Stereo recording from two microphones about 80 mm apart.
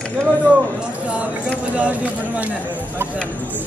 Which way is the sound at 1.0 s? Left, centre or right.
Centre.